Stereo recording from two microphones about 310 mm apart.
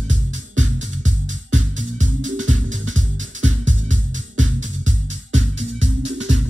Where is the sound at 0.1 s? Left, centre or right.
Right.